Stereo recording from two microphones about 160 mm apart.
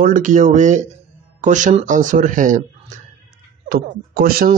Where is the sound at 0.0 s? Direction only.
55° right (ahead or behind).